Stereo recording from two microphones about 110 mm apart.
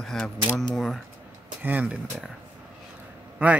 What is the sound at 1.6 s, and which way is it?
Speech, 15° right (ahead or behind).